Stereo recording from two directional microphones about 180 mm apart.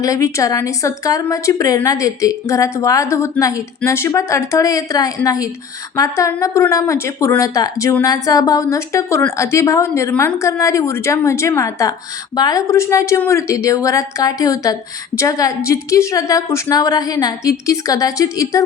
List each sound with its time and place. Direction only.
0.0 s a woman's voice: 20° left (ahead or behind)